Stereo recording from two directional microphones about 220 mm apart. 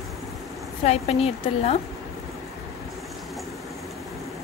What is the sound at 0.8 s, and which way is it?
Speech, 30° left (ahead or behind).